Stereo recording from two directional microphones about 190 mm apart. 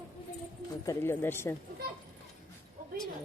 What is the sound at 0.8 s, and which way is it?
Speech, 15° left (ahead or behind).